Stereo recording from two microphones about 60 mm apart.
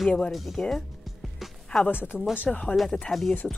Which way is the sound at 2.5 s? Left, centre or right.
Left.